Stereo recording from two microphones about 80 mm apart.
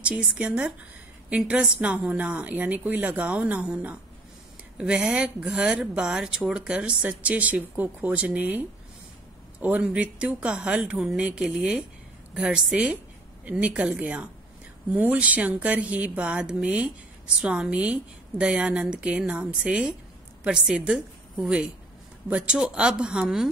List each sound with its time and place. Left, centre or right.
0.4 s a woman's voice: centre